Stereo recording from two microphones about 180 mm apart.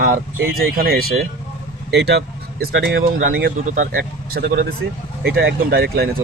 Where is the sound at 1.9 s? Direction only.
70° right (ahead or behind); by 3.1 s 90° right.